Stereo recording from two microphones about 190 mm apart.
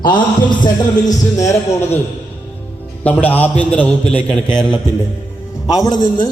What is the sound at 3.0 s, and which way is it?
A man's voice, 10° left (ahead or behind).